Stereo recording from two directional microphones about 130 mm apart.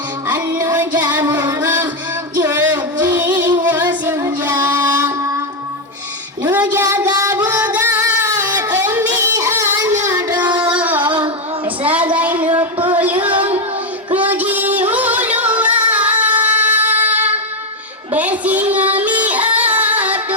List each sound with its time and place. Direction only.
0.3 s music: 15° right (ahead or behind)
4.0 s child singing: 20° right (ahead or behind)
6.4 s female singing: 15° right (ahead or behind)
8.8 s child singing: 15° right (ahead or behind)
10.5 s a sound: 35° right (ahead or behind)
10.8 s music: 15° right (ahead or behind)
11.0 s female singing: 35° right (ahead or behind)
11.6 s child singing: 10° right (ahead or behind)
12.1 s a sound: 10° right (ahead or behind)
12.9 s music: 15° right (ahead or behind)
14.2 s a sound: 10° right (ahead or behind)
14.8 s music: 10° right (ahead or behind)
15.9 s a sound: 10° right (ahead or behind)
18.1 s music: 10° right (ahead or behind)